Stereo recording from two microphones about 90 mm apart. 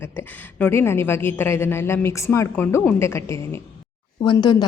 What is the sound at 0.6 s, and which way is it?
A woman's voice, 30° left (ahead or behind).